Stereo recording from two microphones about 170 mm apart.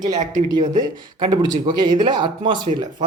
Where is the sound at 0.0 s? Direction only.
25° right (ahead or behind).